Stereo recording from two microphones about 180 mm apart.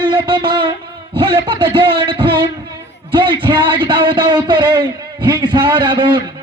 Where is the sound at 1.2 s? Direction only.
30° right (ahead or behind).